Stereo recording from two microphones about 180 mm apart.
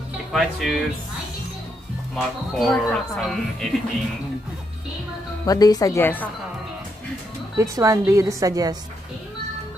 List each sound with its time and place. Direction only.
0.3 s speech: centre (ahead or behind)
2.1 s speech: centre (ahead or behind)
5.4 s speech: 20° left (ahead or behind)
7.5 s a woman's voice: 15° right (ahead or behind)